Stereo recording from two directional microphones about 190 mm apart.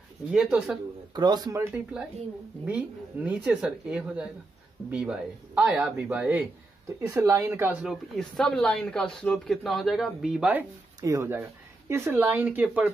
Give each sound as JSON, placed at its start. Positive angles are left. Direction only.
{"t": 0.3, "sound": "speech", "side_deg": -5}
{"t": 1.1, "sound": "speech", "side_deg": -20}
{"t": 2.6, "sound": "speech", "side_deg": -10}
{"t": 11.0, "sound": "speech", "side_deg": -15}